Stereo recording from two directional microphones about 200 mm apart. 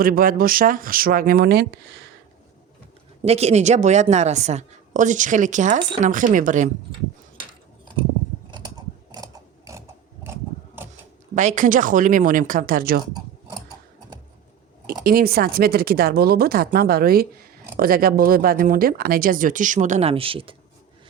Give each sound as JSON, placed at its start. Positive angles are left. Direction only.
{"t": 0.0, "sound": "speech", "side_deg": -45}
{"t": 3.2, "sound": "a woman's voice", "side_deg": -30}
{"t": 8.4, "sound": "scissors", "side_deg": -25}
{"t": 9.1, "sound": "a sound", "side_deg": -15}
{"t": 11.3, "sound": "a woman's voice", "side_deg": -40}
{"t": 15.0, "sound": "speech", "side_deg": -50}